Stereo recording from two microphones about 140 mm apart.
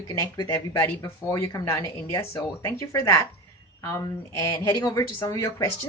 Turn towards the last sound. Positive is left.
turn(degrees=20)  # may be behind; listen again after turning